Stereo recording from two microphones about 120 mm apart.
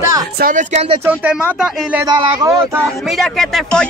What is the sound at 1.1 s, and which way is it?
Speech, 10° right (ahead or behind).